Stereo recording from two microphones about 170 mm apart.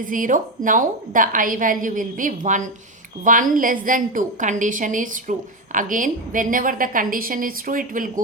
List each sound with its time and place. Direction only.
0.0 s a woman's voice: 50° right (ahead or behind)